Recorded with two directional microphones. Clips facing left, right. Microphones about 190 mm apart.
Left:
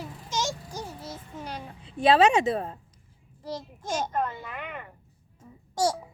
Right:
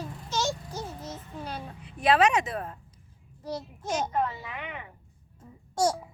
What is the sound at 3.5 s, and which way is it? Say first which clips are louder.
Speech: even; 10° right (ahead or behind).